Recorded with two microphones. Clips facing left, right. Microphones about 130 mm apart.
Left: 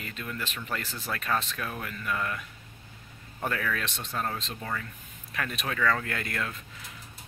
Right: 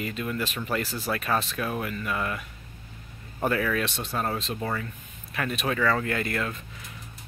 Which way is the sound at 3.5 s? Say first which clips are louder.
Right 5 dB; 15° right (ahead or behind).